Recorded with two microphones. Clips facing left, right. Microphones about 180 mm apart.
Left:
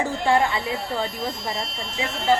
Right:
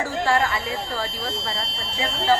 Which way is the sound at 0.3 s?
20° left (ahead or behind).